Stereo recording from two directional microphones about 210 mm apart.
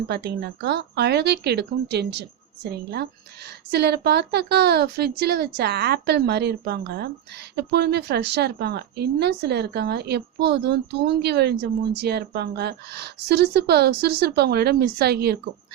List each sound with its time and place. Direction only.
0.1 s speech: 50° right (ahead or behind)